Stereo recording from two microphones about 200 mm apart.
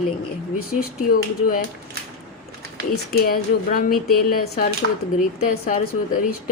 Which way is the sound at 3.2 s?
50° left (ahead or behind).